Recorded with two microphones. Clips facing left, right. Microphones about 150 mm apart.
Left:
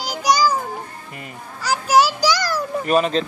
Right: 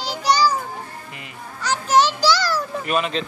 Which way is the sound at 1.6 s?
10° left (ahead or behind).